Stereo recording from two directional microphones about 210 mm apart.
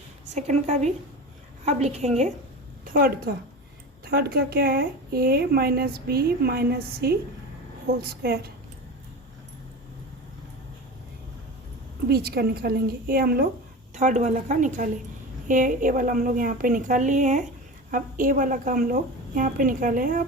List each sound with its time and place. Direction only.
0.3 s a woman's voice: 35° right (ahead or behind)
2.8 s a woman's voice: 45° right (ahead or behind)
8.2 s a woman's voice: 50° right (ahead or behind)
12.0 s a woman's voice: 50° right (ahead or behind)
13.9 s a woman's voice: 35° right (ahead or behind)